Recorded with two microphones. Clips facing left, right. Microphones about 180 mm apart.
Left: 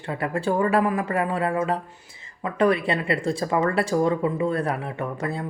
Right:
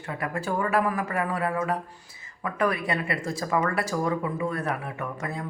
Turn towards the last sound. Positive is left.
turn(degrees=30)  # may be behind; listen again after turning